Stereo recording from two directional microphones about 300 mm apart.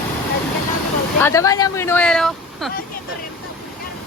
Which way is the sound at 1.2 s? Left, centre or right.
Centre.